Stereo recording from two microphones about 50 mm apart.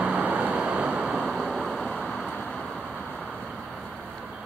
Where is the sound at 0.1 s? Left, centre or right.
Right.